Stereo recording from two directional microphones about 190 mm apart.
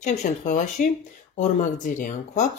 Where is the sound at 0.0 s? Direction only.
40° left (ahead or behind).